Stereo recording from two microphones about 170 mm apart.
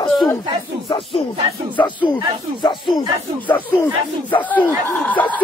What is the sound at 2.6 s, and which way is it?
Snake, 30° left (ahead or behind).